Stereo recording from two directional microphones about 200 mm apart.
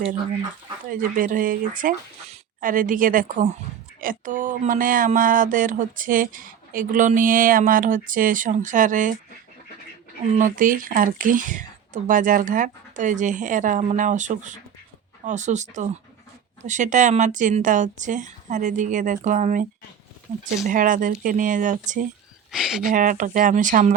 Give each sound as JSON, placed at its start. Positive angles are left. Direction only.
{"t": 0.9, "sound": "a sound", "side_deg": -45}
{"t": 10.3, "sound": "speech", "side_deg": -40}
{"t": 20.7, "sound": "speech", "side_deg": -40}
{"t": 22.5, "sound": "speech", "side_deg": 0}
{"t": 22.8, "sound": "speech", "side_deg": -40}